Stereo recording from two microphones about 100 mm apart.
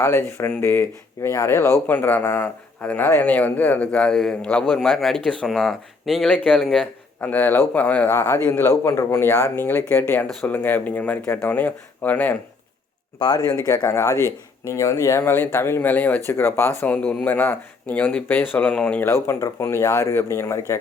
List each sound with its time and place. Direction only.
0.0 s speech: 25° left (ahead or behind)
1.9 s a man's voice: 20° left (ahead or behind)
13.1 s speech: 45° left (ahead or behind)
13.8 s speech: 25° left (ahead or behind)
19.0 s speech: 25° left (ahead or behind)